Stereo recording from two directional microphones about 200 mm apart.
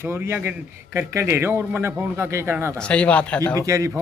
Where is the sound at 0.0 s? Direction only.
10° right (ahead or behind).